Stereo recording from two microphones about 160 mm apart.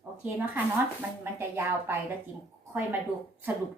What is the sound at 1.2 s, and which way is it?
Speech, 15° right (ahead or behind).